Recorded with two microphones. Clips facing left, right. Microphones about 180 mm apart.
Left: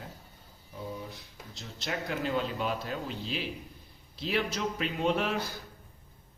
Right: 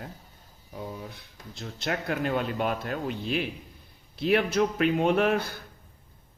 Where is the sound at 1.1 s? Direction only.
55° right (ahead or behind).